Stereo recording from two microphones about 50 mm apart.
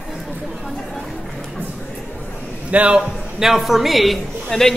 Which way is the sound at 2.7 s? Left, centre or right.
Right.